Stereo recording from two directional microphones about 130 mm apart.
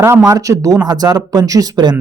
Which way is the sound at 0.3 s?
25° right (ahead or behind).